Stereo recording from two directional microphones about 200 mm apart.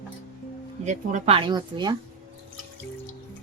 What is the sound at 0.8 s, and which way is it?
Speech, 35° right (ahead or behind).